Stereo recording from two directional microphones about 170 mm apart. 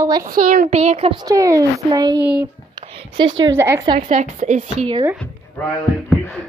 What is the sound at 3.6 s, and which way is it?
Speech, 15° right (ahead or behind).